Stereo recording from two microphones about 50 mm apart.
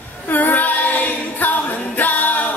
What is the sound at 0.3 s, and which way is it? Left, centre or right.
Female singing, left.